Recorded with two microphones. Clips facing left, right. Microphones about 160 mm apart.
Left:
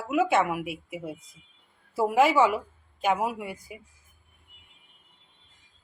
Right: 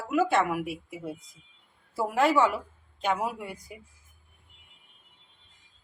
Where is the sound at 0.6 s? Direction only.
65° left (ahead or behind).